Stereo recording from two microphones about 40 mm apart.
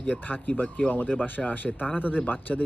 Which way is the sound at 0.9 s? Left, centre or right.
Left.